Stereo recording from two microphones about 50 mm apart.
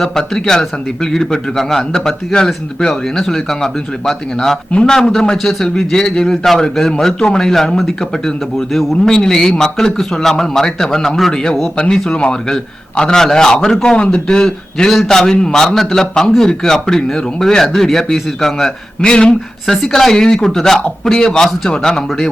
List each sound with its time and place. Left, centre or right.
0.0 s a man's voice: centre
9.0 s a man's voice: centre